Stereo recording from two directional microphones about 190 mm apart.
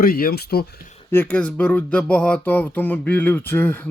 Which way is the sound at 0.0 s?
50° left (ahead or behind).